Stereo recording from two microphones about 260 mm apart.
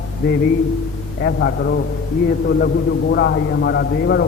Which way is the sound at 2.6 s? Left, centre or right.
Left.